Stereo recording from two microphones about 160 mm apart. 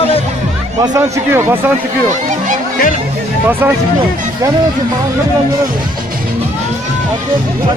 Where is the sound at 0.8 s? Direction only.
20° right (ahead or behind).